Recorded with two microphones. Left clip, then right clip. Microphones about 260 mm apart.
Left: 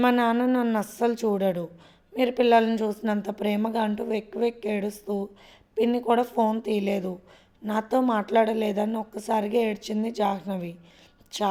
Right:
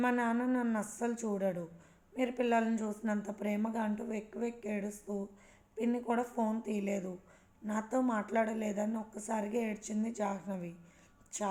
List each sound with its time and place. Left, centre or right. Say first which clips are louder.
0.0 s a woman's voice: left 10 dB; left